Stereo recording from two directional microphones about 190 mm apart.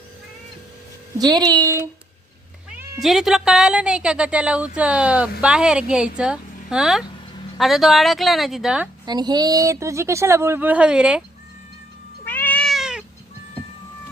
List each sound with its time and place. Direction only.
1.2 s speech: 20° right (ahead or behind)
2.6 s speech: 5° right (ahead or behind)
9.0 s a woman's voice: 20° right (ahead or behind); by 11.2 s 5° right (ahead or behind)
12.2 s cat: 10° left (ahead or behind)